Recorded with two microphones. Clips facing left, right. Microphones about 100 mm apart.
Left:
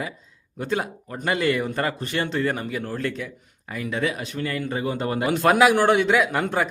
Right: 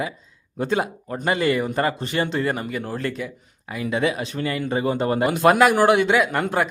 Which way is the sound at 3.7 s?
20° right (ahead or behind).